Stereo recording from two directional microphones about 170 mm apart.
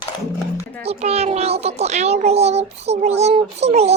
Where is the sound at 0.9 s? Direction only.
40° right (ahead or behind).